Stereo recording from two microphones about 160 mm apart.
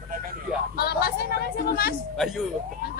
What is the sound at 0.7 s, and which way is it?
Speech, 75° left (ahead or behind).